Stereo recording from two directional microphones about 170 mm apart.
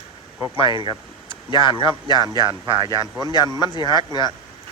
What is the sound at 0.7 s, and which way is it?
Speech, 25° right (ahead or behind).